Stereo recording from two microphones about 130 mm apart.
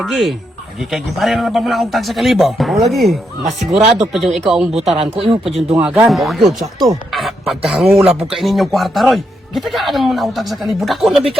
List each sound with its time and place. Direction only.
0.0 s a man's voice: centre (ahead or behind)
3.8 s speech: 60° right (ahead or behind)
4.0 s a man's voice: centre (ahead or behind)
4.9 s speech: 45° right (ahead or behind)
5.9 s a man's voice: 5° right (ahead or behind)